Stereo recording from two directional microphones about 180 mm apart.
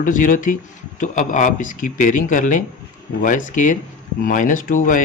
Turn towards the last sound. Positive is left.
turn(degrees=45)  # may be behind; listen again after turning